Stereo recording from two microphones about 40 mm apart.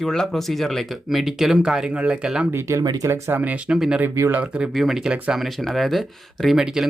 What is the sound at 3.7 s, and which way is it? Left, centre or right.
Speech, right.